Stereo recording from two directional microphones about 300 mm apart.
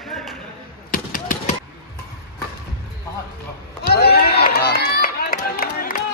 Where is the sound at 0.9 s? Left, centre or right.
Left.